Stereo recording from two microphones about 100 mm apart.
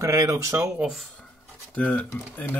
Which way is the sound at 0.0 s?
30° right (ahead or behind).